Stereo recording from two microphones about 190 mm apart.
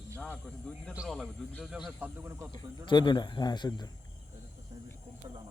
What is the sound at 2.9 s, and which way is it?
A man's voice, 25° left (ahead or behind).